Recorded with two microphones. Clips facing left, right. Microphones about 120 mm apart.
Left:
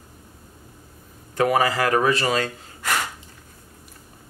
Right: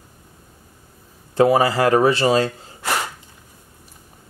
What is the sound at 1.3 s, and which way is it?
Speech, 30° right (ahead or behind).